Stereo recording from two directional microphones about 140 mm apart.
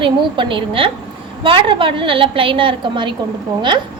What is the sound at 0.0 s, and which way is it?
A woman's voice, 35° right (ahead or behind).